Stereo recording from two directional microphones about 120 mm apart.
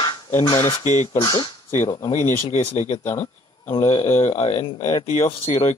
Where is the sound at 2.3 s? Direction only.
80° left.